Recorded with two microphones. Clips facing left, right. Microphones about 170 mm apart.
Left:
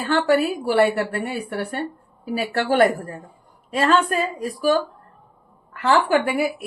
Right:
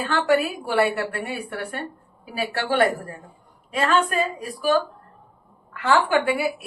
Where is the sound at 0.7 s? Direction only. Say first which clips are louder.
Left 3 dB; 40° left (ahead or behind).